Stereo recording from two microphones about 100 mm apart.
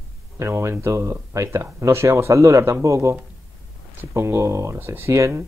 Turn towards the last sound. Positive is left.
turn(degrees=-30)  # may be behind; listen again after turning